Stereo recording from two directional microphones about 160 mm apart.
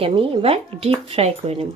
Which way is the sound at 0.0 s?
35° right (ahead or behind).